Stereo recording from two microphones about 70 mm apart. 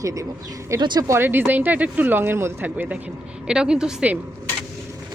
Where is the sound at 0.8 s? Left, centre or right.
Right.